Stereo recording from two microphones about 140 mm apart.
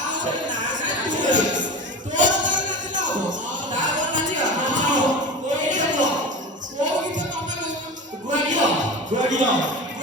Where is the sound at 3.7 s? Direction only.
65° right (ahead or behind).